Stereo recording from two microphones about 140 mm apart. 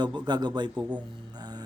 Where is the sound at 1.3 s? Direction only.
30° right (ahead or behind).